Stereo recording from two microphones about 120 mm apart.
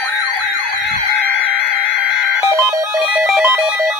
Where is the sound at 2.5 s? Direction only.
30° right (ahead or behind).